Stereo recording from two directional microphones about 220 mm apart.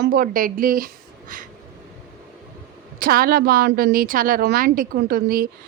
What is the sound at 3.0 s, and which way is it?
A woman's voice, 40° right (ahead or behind).